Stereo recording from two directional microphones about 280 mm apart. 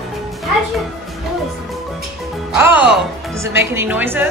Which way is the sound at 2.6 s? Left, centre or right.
Centre.